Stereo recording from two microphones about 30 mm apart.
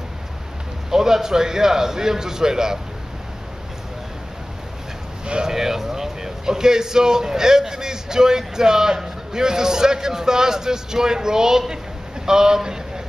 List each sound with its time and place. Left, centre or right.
0.8 s a man's voice: centre
5.2 s speech: right
5.5 s a man's voice: centre